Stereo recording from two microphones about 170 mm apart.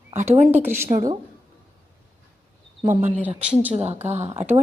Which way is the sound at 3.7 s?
40° right (ahead or behind).